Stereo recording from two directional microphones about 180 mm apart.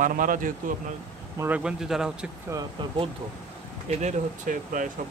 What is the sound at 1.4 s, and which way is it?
Speech, 5° right (ahead or behind).